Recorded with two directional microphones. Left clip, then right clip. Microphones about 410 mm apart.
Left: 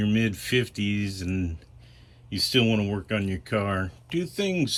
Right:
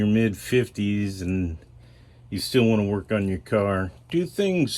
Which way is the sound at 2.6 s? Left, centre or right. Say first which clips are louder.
Right 5 dB; centre.